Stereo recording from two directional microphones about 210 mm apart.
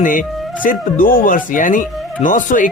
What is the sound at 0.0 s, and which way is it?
Speech, 40° left (ahead or behind).